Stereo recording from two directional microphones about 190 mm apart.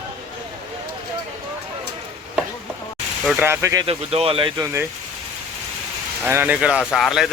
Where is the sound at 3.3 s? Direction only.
10° right (ahead or behind).